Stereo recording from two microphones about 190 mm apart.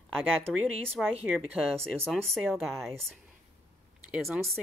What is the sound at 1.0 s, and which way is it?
Speech, centre (ahead or behind).